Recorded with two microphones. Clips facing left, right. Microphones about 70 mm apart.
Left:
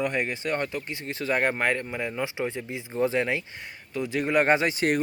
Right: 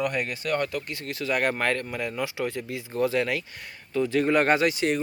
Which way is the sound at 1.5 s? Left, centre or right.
Centre.